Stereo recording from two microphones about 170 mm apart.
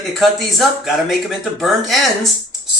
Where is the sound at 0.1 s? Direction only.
Centre (ahead or behind).